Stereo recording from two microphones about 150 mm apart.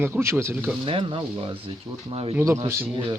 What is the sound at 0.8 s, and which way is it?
Speech, 35° right (ahead or behind).